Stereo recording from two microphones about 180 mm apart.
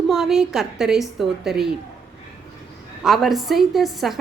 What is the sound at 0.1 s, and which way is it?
A woman's voice, centre (ahead or behind).